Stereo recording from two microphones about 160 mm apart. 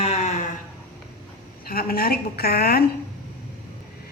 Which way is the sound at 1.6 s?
70° left (ahead or behind).